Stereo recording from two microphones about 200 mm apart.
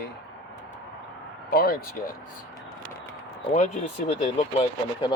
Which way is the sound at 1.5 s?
50° left (ahead or behind).